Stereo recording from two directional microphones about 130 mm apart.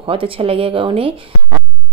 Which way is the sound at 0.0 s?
45° right (ahead or behind).